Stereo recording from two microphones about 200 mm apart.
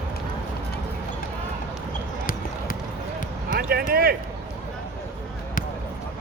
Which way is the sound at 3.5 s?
50° right (ahead or behind).